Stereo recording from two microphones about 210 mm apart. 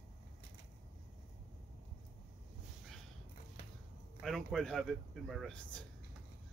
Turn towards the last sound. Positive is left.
turn(degrees=0)  # may be behind; listen again after turning